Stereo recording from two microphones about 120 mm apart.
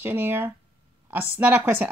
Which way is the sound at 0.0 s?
20° right (ahead or behind).